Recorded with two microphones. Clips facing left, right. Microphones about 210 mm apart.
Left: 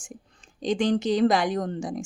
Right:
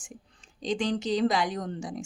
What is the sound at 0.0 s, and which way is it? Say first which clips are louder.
A woman's voice: left 3 dB; 50° left (ahead or behind).